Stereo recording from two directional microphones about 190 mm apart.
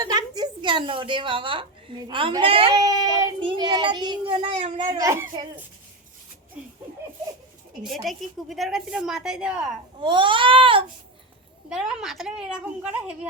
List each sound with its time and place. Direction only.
0.0 s speech: 20° right (ahead or behind)
7.9 s a woman's voice: centre (ahead or behind)
10.0 s speech: 25° right (ahead or behind)
11.7 s a woman's voice: 5° right (ahead or behind)